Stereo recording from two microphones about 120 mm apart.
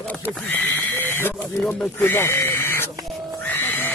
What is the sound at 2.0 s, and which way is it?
Pig, 20° left (ahead or behind).